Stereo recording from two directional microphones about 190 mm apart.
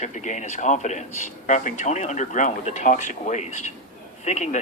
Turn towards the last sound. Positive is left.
turn(degrees=40)  # may be behind; listen again after turning